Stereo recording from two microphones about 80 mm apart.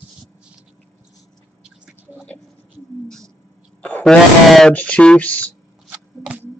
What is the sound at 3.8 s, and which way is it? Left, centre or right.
Fart, left.